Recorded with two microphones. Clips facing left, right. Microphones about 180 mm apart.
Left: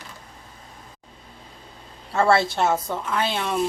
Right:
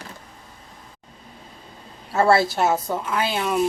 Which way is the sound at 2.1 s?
5° right (ahead or behind).